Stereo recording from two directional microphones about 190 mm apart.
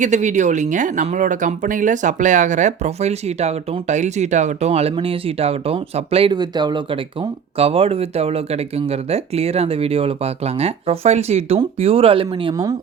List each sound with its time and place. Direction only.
0.0 s speech: 40° right (ahead or behind); by 12.7 s 25° right (ahead or behind)